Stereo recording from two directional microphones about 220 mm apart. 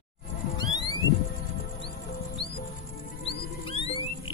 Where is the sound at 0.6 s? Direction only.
20° left (ahead or behind).